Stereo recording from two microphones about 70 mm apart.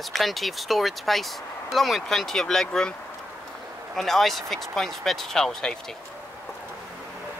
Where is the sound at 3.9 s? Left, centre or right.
Centre.